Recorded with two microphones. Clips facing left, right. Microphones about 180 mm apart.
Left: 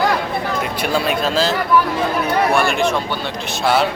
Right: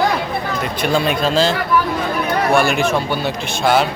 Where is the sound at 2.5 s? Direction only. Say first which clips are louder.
Right 1 dB; 5° right (ahead or behind).